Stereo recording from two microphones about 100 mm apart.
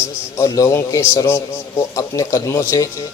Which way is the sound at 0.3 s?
35° left (ahead or behind).